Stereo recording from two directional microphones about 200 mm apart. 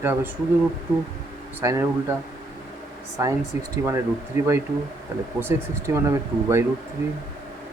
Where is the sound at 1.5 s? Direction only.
10° right (ahead or behind).